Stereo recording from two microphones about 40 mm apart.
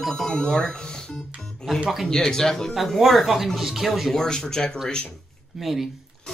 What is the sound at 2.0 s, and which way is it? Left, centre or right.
Speech, centre.